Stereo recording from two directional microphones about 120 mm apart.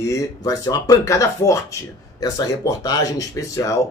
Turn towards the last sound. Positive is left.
turn(degrees=25)  # may be behind; listen again after turning